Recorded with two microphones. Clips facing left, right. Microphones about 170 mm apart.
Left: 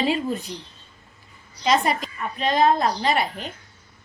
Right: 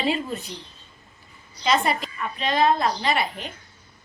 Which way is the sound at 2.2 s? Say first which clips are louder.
Left 3 dB; 40° left (ahead or behind).